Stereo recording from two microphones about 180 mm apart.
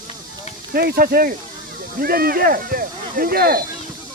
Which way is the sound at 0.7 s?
55° right (ahead or behind).